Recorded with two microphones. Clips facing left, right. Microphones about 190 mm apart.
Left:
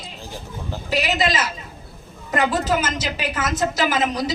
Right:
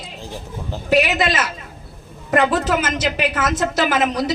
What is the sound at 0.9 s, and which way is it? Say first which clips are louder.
A woman's voice: right 4 dB; 60° right (ahead or behind).